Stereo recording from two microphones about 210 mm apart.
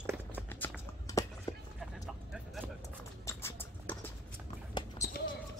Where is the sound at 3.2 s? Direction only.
10° left (ahead or behind).